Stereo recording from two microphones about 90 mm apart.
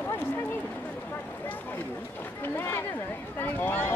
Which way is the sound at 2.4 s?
25° left (ahead or behind).